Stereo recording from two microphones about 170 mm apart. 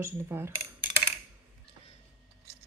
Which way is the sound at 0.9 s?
40° left (ahead or behind).